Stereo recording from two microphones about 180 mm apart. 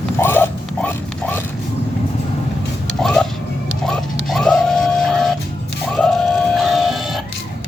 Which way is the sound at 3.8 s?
5° left (ahead or behind).